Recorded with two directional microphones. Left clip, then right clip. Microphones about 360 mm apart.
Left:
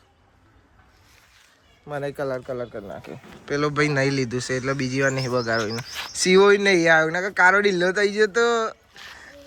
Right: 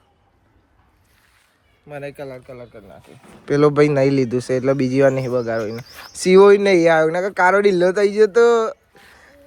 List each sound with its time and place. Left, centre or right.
2.5 s speech: left
3.4 s speech: centre